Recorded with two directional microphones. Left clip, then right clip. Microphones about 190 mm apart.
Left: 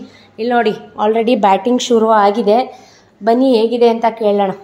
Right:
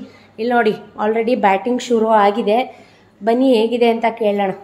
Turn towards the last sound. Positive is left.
turn(degrees=15)  # may be behind; listen again after turning